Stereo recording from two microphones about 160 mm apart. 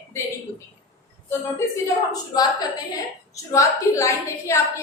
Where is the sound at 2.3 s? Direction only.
25° left (ahead or behind).